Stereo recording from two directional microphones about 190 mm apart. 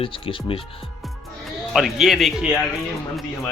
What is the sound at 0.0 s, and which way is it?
Speech, 25° left (ahead or behind).